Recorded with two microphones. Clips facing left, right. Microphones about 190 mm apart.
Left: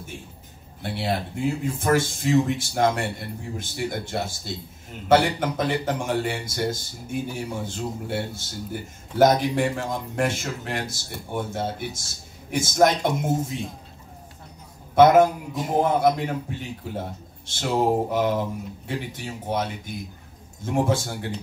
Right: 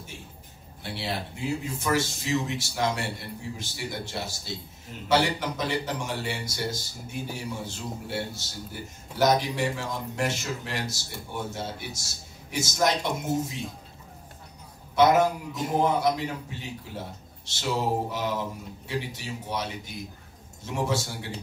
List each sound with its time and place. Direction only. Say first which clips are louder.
0.8 s a man's voice: left 6 dB; 50° left (ahead or behind)
15.0 s a man's voice: left 5 dB; 50° left (ahead or behind)